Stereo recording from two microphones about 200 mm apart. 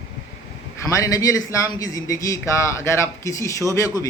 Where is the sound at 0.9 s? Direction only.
15° left (ahead or behind).